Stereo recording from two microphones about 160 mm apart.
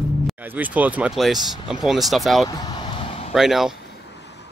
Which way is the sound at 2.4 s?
25° left (ahead or behind).